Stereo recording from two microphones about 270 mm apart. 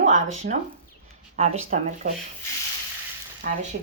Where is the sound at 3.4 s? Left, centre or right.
Right.